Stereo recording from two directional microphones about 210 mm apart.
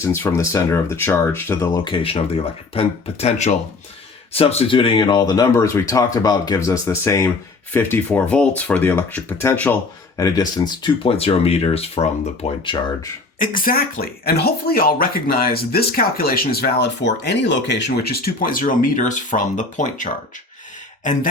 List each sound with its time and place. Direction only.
0.0 s speech: 10° left (ahead or behind); by 12.8 s 25° left (ahead or behind)
13.4 s speech: 40° left (ahead or behind)